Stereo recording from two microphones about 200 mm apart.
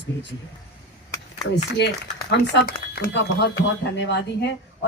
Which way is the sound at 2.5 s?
55° left (ahead or behind).